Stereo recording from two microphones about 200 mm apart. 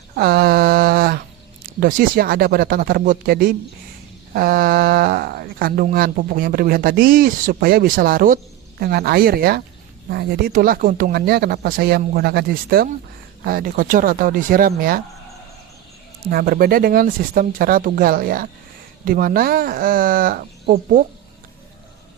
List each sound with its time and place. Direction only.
0.2 s a sound: 50° right (ahead or behind)
1.6 s speech: 45° right (ahead or behind)
16.2 s speech: 45° right (ahead or behind)